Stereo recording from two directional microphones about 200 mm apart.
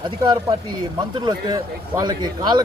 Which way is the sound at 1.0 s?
20° right (ahead or behind).